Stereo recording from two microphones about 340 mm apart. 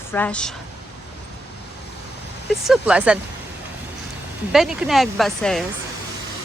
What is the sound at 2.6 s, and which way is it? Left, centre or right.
Speech, centre.